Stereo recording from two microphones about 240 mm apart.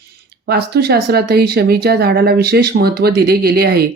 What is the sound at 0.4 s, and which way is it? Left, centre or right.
Speech, right.